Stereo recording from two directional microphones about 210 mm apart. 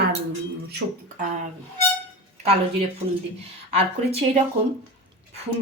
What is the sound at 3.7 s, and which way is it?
Speech, 30° right (ahead or behind).